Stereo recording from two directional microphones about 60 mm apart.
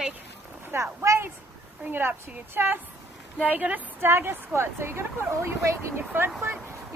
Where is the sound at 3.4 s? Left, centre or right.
Right.